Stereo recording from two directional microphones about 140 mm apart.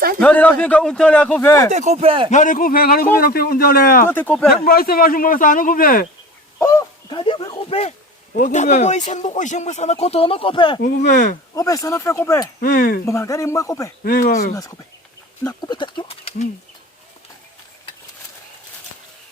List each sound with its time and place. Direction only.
0.2 s speech: 10° left (ahead or behind)
1.7 s speech: 55° right (ahead or behind)
2.3 s speech: 70° left (ahead or behind); by 4.0 s 90° left
4.0 s speech: 15° left (ahead or behind)
4.6 s speech: 90° left
7.1 s speech: 35° left (ahead or behind)
8.3 s speech: 70° left (ahead or behind); by 10.8 s 35° left (ahead or behind)
10.8 s speech: 60° left (ahead or behind)
11.5 s speech: 25° left (ahead or behind)
12.5 s speech: 85° left
13.1 s speech: 20° left (ahead or behind)
14.0 s speech: 90° left; by 14.5 s 75° left (ahead or behind)
14.5 s speech: 25° left (ahead or behind); by 16.5 s 45° left (ahead or behind)